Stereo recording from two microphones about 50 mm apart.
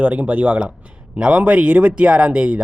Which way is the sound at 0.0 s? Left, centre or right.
Right.